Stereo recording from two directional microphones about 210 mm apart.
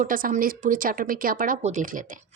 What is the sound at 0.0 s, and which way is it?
A woman's voice, 40° right (ahead or behind).